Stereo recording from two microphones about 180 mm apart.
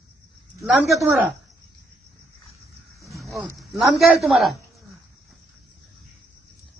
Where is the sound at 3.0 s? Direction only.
Centre (ahead or behind).